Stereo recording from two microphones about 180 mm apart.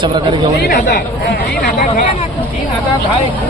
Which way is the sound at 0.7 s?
55° left (ahead or behind).